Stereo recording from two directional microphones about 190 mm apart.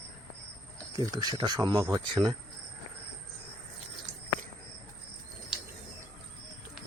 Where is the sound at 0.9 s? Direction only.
20° right (ahead or behind).